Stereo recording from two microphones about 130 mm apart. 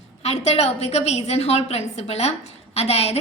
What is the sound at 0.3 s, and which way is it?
A woman's voice, 55° left (ahead or behind).